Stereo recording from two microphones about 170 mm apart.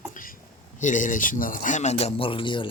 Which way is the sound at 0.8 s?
50° left (ahead or behind).